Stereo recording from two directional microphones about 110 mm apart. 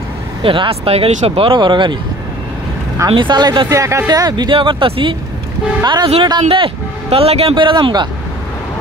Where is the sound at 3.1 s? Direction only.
45° right (ahead or behind).